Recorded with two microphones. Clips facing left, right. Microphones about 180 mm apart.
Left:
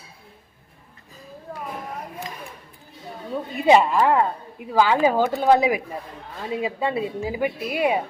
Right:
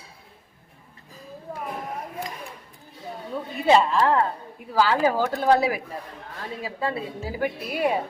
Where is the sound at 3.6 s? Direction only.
15° left (ahead or behind).